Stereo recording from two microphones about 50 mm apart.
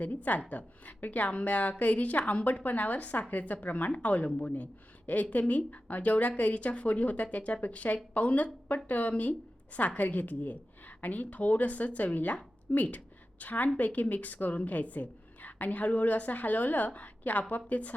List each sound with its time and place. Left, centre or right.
0.0 s a woman's voice: left